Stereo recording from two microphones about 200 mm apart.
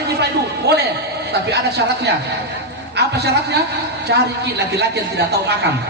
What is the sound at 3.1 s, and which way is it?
A man's voice, 55° right (ahead or behind).